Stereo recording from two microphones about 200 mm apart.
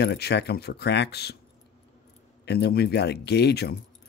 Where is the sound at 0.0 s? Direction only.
55° left (ahead or behind).